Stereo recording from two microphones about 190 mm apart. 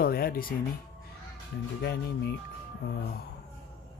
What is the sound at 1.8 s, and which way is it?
Speech, 60° left (ahead or behind).